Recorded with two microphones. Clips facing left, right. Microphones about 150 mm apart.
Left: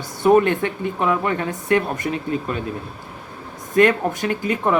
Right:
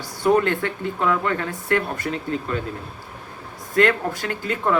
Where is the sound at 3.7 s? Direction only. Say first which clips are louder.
Left 3 dB; 20° left (ahead or behind).